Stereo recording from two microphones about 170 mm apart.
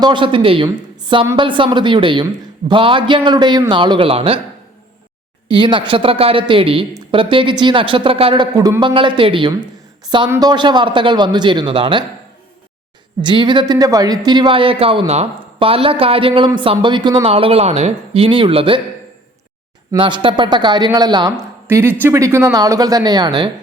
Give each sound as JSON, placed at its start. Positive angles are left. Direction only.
{"t": 0.0, "sound": "a woman's voice", "side_deg": -30}
{"t": 5.5, "sound": "a woman's voice", "side_deg": -30}
{"t": 10.2, "sound": "speech", "side_deg": -15}
{"t": 10.5, "sound": "speech", "side_deg": -25}
{"t": 13.2, "sound": "a woman's voice", "side_deg": -25}
{"t": 19.9, "sound": "speech", "side_deg": -30}
{"t": 21.7, "sound": "speech", "side_deg": -15}